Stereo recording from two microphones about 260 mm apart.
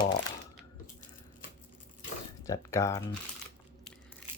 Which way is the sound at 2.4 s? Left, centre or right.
Centre.